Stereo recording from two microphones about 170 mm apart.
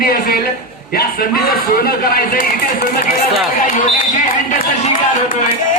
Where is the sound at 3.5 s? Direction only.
50° left (ahead or behind).